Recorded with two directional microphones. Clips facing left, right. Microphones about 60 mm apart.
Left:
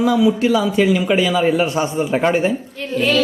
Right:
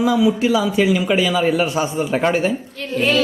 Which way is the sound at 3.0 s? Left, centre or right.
Right.